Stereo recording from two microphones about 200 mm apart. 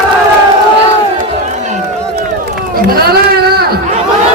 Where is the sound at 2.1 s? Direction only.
50° right (ahead or behind).